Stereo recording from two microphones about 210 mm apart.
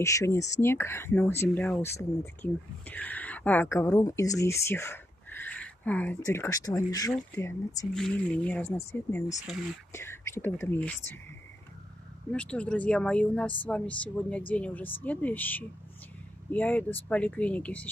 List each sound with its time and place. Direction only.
0.0 s speech: 15° left (ahead or behind)
7.9 s speech: 5° left (ahead or behind)
12.3 s speech: 5° left (ahead or behind)